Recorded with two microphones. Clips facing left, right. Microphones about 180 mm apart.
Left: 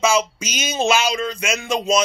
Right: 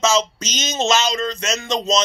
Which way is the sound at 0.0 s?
10° left (ahead or behind).